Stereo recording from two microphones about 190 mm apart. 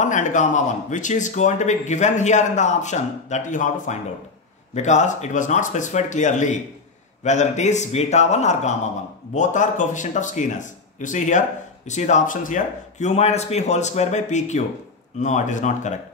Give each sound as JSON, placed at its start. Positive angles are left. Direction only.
{"t": 0.0, "sound": "speech", "side_deg": 40}